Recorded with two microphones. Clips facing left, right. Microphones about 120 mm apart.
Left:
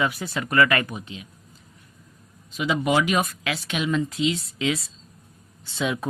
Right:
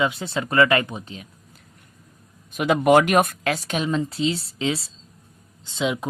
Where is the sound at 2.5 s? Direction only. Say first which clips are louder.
Right 6 dB; 55° right (ahead or behind); by 4.9 s 30° right (ahead or behind).